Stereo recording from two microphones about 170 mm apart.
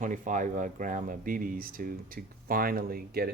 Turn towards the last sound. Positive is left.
turn(degrees=-60)  # may be behind; listen again after turning